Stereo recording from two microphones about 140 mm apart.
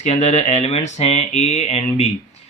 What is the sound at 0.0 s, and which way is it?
Speech, 55° left (ahead or behind).